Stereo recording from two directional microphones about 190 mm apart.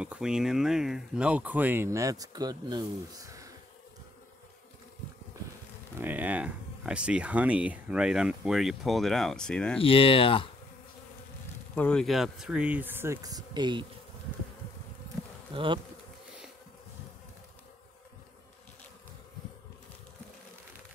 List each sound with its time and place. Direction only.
0.0 s speech: 5° right (ahead or behind)
5.9 s speech: 10° right (ahead or behind)
9.8 s speech: 30° left (ahead or behind)
11.7 s speech: 5° left (ahead or behind); by 13.8 s 25° right (ahead or behind)
15.5 s bee: 25° right (ahead or behind)